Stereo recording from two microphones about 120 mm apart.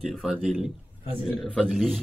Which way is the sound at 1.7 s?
5° left (ahead or behind).